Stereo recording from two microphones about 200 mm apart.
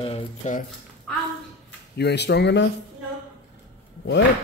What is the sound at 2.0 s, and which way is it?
Speech, 55° left (ahead or behind).